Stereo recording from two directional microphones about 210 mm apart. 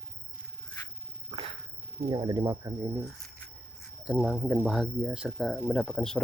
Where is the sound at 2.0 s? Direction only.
20° right (ahead or behind).